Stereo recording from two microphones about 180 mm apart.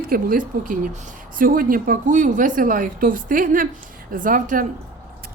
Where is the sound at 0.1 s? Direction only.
50° right (ahead or behind).